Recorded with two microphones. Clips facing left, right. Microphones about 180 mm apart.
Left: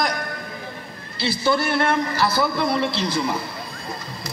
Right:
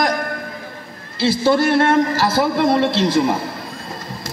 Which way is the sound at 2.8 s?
90° right.